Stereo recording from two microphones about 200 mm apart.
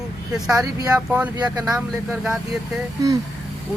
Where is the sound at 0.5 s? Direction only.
15° right (ahead or behind); by 2.6 s centre (ahead or behind).